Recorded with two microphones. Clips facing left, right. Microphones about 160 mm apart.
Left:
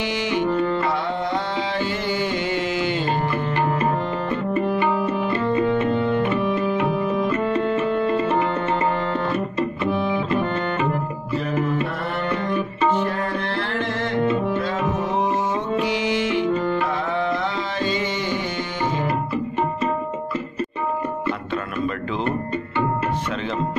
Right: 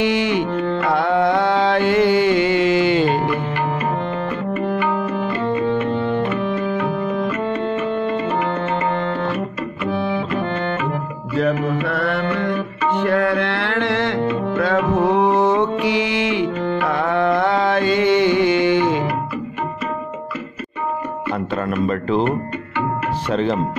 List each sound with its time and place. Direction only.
0.0 s music: 60° right (ahead or behind); by 3.1 s 80° right
7.4 s music: 5° left (ahead or behind)
11.9 s music: 75° right (ahead or behind)
14.5 s music: 65° right (ahead or behind)